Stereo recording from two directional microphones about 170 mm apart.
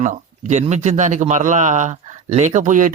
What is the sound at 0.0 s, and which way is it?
Speech, 45° right (ahead or behind).